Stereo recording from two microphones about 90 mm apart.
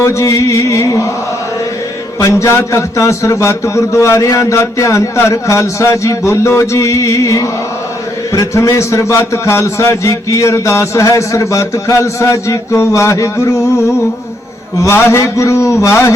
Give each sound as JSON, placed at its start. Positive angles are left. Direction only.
{"t": 0.0, "sound": "a man's voice", "side_deg": 35}
{"t": 2.1, "sound": "a man's voice", "side_deg": 35}
{"t": 14.8, "sound": "a man's voice", "side_deg": 30}